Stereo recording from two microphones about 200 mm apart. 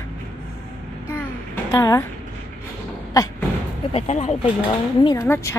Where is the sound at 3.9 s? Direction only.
30° left (ahead or behind).